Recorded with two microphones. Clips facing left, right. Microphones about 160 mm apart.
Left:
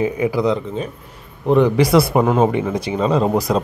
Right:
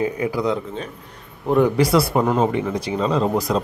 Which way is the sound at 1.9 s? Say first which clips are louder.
Left 3 dB; 10° left (ahead or behind).